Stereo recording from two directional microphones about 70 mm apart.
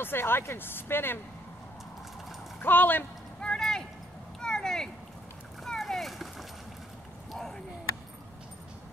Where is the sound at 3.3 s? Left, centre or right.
Centre.